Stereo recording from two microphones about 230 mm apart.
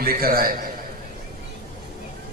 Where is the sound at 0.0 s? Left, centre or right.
Right.